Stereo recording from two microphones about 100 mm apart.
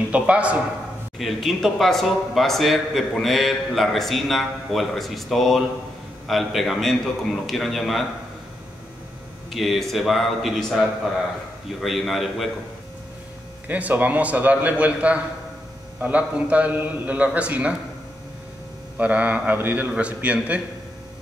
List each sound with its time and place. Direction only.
0.1 s a man's voice: 10° right (ahead or behind)
1.1 s speech: centre (ahead or behind)
9.5 s speech: centre (ahead or behind)
13.7 s a man's voice: 15° right (ahead or behind)
18.9 s a man's voice: 15° right (ahead or behind)